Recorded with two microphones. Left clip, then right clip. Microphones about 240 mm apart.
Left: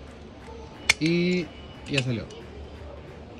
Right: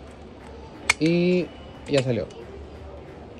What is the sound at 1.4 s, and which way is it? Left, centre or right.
Speech, right.